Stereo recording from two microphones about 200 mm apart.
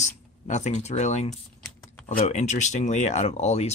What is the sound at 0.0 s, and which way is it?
Speech, 35° left (ahead or behind).